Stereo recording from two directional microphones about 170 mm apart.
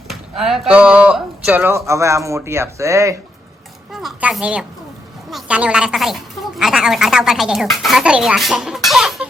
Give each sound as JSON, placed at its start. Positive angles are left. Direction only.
{"t": 0.1, "sound": "speech", "side_deg": 0}
{"t": 3.9, "sound": "speech", "side_deg": -5}